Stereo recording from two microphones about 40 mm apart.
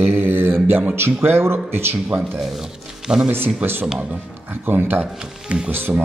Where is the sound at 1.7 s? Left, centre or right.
Right.